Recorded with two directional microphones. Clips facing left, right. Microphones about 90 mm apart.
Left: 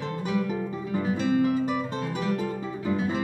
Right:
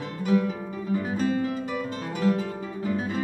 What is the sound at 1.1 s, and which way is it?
Music, 40° right (ahead or behind).